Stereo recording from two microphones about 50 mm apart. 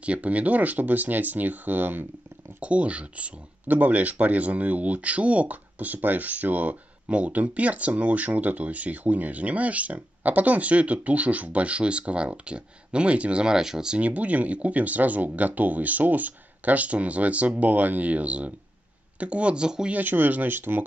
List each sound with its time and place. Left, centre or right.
0.0 s speech: right
2.6 s speech: right
13.9 s speech: right
19.9 s speech: right